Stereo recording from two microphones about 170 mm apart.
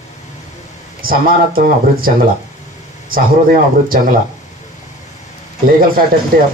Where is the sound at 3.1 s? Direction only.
55° right (ahead or behind).